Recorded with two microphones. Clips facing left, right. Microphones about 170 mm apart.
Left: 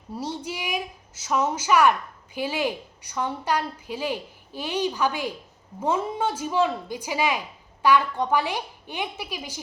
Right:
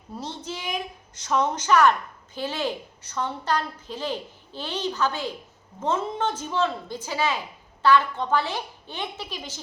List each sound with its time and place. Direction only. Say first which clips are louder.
0.1 s a woman's voice: left 3 dB; 10° left (ahead or behind)